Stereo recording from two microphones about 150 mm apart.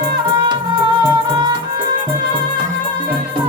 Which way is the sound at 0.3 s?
30° right (ahead or behind).